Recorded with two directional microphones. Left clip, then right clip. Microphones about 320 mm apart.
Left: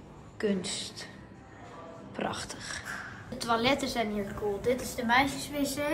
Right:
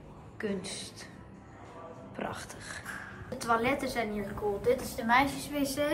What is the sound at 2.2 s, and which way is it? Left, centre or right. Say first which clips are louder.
A woman's voice: left 4 dB; centre.